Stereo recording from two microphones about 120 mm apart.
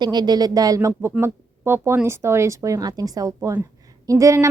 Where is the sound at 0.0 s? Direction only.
35° right (ahead or behind).